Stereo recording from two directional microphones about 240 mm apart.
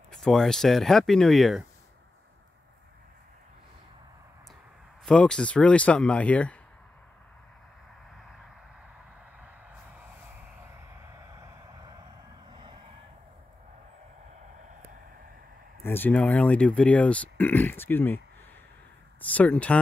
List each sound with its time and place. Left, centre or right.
0.1 s speech: centre
5.0 s speech: centre
11.3 s vehicle: centre
15.8 s speech: centre
19.2 s speech: centre